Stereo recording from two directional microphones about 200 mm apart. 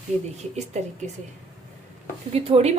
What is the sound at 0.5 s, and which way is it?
Speech, 35° right (ahead or behind).